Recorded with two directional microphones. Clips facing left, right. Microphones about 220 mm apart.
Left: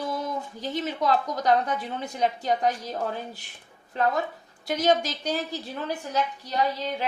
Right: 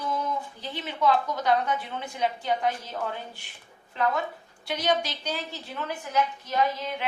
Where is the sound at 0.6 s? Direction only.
40° left (ahead or behind).